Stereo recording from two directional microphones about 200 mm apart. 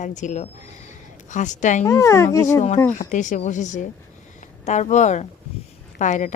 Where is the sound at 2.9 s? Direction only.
40° left (ahead or behind).